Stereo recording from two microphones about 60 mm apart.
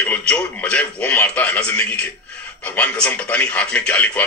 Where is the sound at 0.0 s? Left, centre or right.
Left.